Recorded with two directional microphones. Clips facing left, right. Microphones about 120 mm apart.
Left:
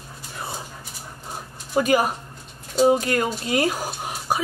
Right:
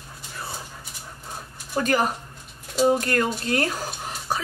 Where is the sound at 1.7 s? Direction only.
10° left (ahead or behind).